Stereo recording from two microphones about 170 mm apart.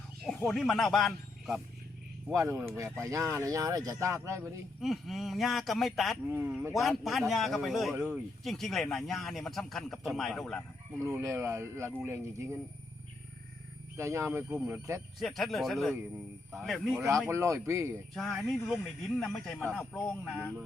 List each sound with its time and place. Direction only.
0.3 s speech: 5° left (ahead or behind)
2.3 s speech: 20° right (ahead or behind)
4.8 s speech: centre (ahead or behind)
6.2 s speech: 15° right (ahead or behind); by 10.6 s centre (ahead or behind)
11.0 s speech: 20° right (ahead or behind)
13.9 s speech: 15° right (ahead or behind)
15.2 s speech: centre (ahead or behind)
17.2 s speech: 15° right (ahead or behind)
18.1 s speech: centre (ahead or behind)